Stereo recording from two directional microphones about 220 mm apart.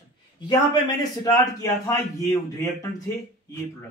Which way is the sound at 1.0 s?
15° left (ahead or behind).